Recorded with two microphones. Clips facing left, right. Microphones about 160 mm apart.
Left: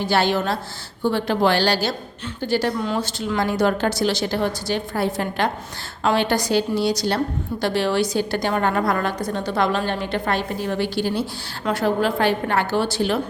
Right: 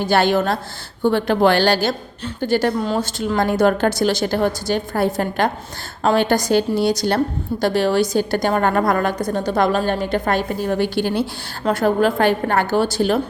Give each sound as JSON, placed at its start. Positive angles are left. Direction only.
{"t": 0.0, "sound": "a woman's voice", "side_deg": -50}